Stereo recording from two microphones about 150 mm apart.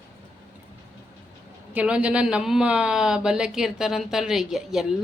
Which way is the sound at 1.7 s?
10° right (ahead or behind).